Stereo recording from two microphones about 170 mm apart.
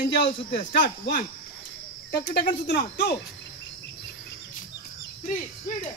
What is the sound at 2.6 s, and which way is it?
Speech, 80° left.